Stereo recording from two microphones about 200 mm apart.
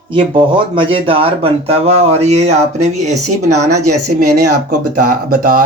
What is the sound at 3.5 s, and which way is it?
Speech, 15° right (ahead or behind).